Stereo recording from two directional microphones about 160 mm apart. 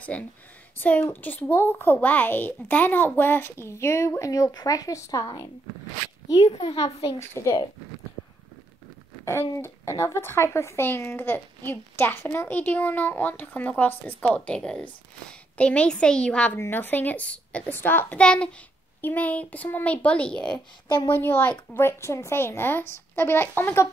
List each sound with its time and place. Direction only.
0.1 s speech: 10° left (ahead or behind)
6.6 s a child's voice: 30° left (ahead or behind)
7.2 s speech: 20° left (ahead or behind)
9.2 s speech: 15° left (ahead or behind)